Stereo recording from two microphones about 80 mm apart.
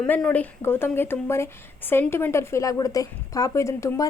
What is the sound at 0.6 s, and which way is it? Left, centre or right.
Speech, left.